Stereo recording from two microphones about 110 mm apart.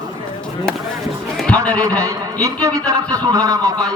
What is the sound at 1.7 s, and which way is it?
A man's voice, 30° right (ahead or behind).